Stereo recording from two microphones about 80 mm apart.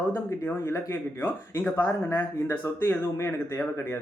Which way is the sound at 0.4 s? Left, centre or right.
Left.